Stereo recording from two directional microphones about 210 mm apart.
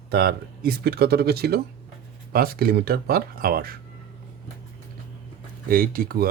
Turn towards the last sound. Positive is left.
turn(degrees=-45)  # may be behind; listen again after turning